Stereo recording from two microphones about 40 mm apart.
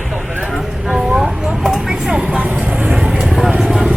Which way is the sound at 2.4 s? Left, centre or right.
Right.